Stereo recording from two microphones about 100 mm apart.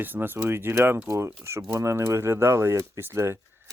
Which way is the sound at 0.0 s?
20° right (ahead or behind).